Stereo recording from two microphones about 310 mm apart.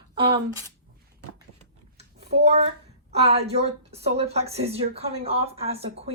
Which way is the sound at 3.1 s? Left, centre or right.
Centre.